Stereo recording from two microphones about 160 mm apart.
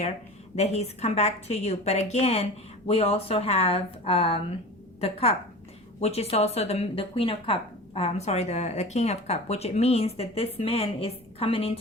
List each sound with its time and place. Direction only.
0.5 s a woman's voice: 40° left (ahead or behind)